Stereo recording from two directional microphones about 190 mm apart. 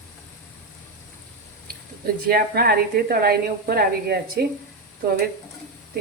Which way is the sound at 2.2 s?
55° right (ahead or behind).